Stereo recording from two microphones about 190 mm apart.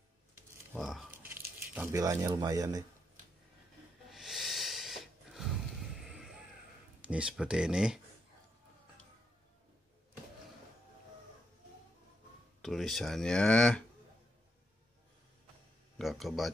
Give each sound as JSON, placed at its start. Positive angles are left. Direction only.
{"t": 0.7, "sound": "a sound", "side_deg": 0}
{"t": 1.1, "sound": "speech", "side_deg": -10}
{"t": 4.1, "sound": "a sound", "side_deg": 0}
{"t": 7.1, "sound": "speech", "side_deg": -5}
{"t": 12.6, "sound": "speech", "side_deg": 0}
{"t": 16.0, "sound": "speech", "side_deg": 0}